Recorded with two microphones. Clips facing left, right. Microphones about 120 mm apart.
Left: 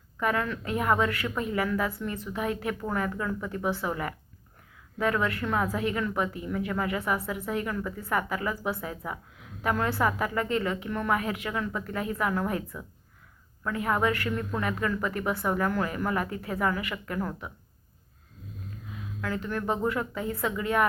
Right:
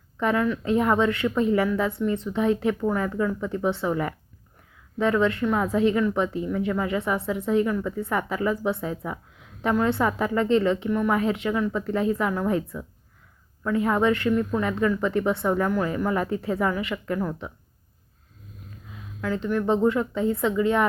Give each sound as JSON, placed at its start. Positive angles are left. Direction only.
{"t": 0.2, "sound": "a woman's voice", "side_deg": -25}
{"t": 19.2, "sound": "a woman's voice", "side_deg": -20}